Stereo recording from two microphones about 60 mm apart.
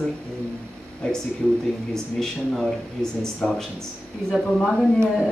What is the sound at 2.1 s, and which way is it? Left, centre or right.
Speech, centre.